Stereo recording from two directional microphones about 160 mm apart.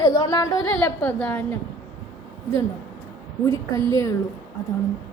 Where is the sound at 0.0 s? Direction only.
25° left (ahead or behind).